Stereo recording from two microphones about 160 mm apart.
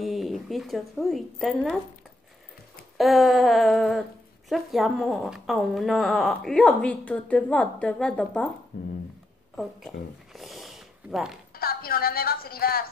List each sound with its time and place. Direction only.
0.0 s speech: centre (ahead or behind)
3.0 s speech: centre (ahead or behind)
10.3 s snort: centre (ahead or behind)
11.5 s a woman's voice: 70° left (ahead or behind)